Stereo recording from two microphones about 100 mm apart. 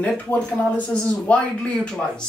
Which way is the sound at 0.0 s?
15° left (ahead or behind).